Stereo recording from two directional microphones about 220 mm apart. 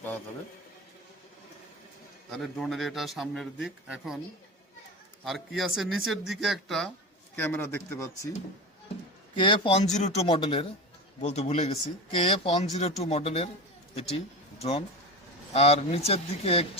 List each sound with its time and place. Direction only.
2.3 s a man's voice: centre (ahead or behind)
5.2 s a man's voice: centre (ahead or behind)
9.3 s a man's voice: 20° left (ahead or behind)
14.6 s a man's voice: 30° left (ahead or behind)